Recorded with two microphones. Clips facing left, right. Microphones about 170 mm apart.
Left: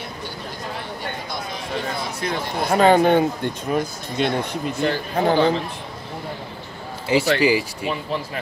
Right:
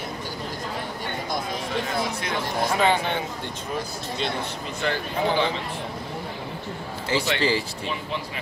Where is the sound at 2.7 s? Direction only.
45° left (ahead or behind).